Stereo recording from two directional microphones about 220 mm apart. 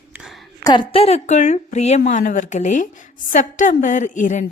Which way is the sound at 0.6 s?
20° left (ahead or behind).